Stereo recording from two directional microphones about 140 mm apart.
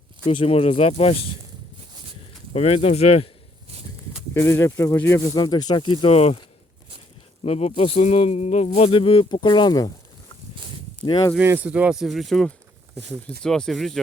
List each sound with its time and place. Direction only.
0.3 s speech: 45° left (ahead or behind)
2.5 s speech: 50° left (ahead or behind)
4.4 s speech: 20° left (ahead or behind)
5.4 s speech: 30° left (ahead or behind); by 6.4 s 45° left (ahead or behind)
7.4 s speech: 50° left (ahead or behind); by 9.9 s 30° left (ahead or behind)
11.0 s speech: 30° left (ahead or behind)
11.3 s speech: 10° right (ahead or behind)